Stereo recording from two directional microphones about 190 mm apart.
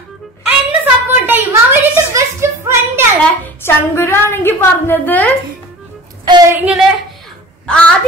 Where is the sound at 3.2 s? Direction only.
10° left (ahead or behind).